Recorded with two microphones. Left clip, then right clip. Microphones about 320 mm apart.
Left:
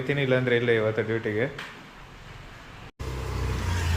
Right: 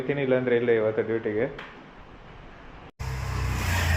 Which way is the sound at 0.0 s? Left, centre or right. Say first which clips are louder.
Even; centre.